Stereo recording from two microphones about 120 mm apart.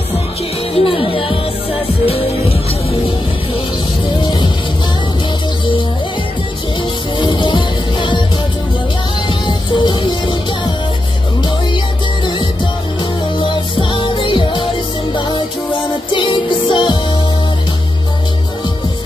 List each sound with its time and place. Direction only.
0.7 s music: 50° left (ahead or behind)
7.2 s music: 45° left (ahead or behind)
9.5 s music: 40° left (ahead or behind)
13.4 s music: 45° left (ahead or behind)